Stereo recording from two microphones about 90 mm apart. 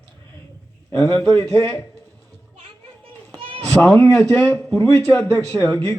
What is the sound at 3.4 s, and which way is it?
Children playing, 75° right (ahead or behind).